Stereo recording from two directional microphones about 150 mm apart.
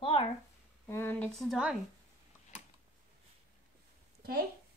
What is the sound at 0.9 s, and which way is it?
Speech, 15° left (ahead or behind).